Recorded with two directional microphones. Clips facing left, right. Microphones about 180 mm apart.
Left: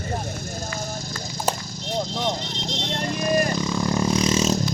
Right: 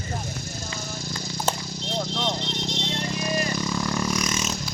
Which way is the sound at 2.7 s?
55° left (ahead or behind).